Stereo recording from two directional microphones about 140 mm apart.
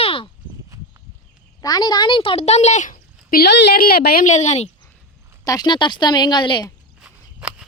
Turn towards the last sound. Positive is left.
turn(degrees=-5)  # may be behind; listen again after turning